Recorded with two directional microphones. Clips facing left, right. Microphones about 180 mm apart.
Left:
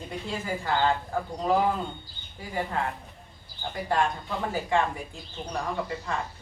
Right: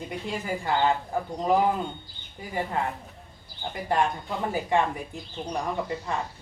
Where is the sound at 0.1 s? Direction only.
15° right (ahead or behind).